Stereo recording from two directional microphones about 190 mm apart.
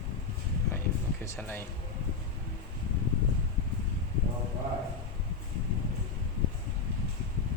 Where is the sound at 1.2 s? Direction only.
10° left (ahead or behind).